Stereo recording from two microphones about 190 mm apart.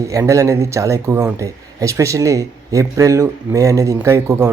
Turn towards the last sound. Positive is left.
turn(degrees=-15)  # may be behind; listen again after turning